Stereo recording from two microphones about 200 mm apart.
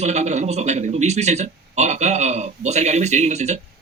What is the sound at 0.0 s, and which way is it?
Speech, 35° right (ahead or behind).